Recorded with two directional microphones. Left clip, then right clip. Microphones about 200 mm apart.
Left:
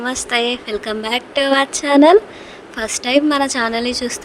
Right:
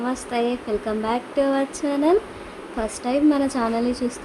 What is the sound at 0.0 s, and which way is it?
A woman's voice, 45° left (ahead or behind).